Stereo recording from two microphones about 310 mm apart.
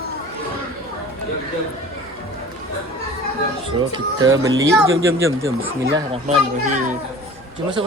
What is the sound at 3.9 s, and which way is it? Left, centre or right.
Speech, centre.